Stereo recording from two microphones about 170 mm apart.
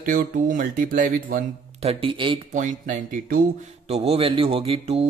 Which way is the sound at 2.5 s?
50° right (ahead or behind).